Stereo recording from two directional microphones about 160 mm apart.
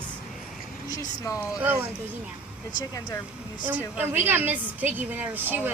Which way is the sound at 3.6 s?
10° right (ahead or behind).